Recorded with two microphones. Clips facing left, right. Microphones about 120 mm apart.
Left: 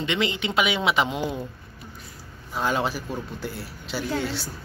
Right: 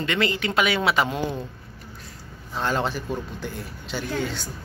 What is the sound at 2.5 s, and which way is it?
A woman's voice, 5° left (ahead or behind).